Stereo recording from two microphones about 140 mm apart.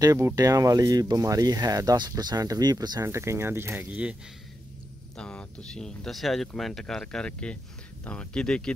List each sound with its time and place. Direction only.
0.0 s speech: 25° right (ahead or behind)
5.1 s speech: 5° left (ahead or behind)